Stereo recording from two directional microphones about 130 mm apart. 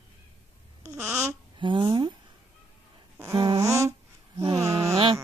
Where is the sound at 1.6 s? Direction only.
40° right (ahead or behind).